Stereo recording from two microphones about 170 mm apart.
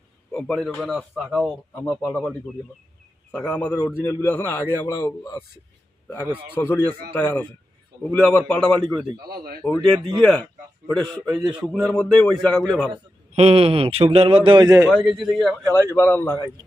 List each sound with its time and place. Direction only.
0.3 s a man's voice: 5° left (ahead or behind)
3.3 s a man's voice: 10° left (ahead or behind)
6.6 s a man's voice: 15° left (ahead or behind)
9.3 s speech: 65° right (ahead or behind)
9.6 s a man's voice: 5° left (ahead or behind)
12.9 s speech: 35° right (ahead or behind)
14.8 s a man's voice: centre (ahead or behind)
15.7 s a man's voice: 10° left (ahead or behind)